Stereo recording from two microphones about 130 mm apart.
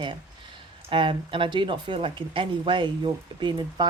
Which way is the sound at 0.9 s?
40° right (ahead or behind).